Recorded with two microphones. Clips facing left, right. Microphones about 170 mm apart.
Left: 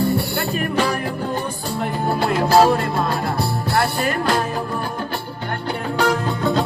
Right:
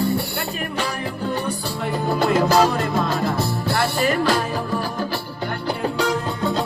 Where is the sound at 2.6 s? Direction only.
40° left (ahead or behind).